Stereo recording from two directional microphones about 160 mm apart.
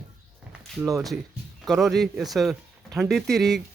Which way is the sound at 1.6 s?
Centre (ahead or behind).